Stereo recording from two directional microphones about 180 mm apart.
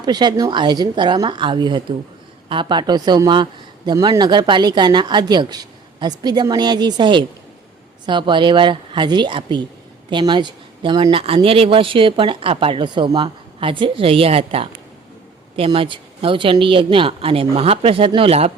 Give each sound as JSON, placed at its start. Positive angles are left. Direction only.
{"t": 0.0, "sound": "a woman's voice", "side_deg": -25}